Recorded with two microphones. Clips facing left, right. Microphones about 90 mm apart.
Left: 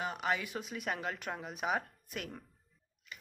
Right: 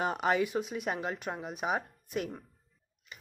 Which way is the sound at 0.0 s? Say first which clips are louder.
Right 6 dB; 35° right (ahead or behind).